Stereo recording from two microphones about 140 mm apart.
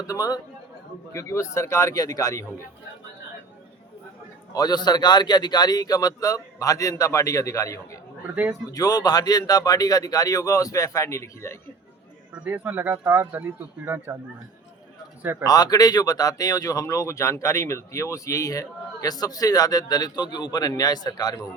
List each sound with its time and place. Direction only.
0.0 s speech: 25° left (ahead or behind)
4.5 s speech: 30° left (ahead or behind)
12.3 s speech: 15° right (ahead or behind)
15.2 s speech: 15° right (ahead or behind)
15.4 s speech: 25° left (ahead or behind)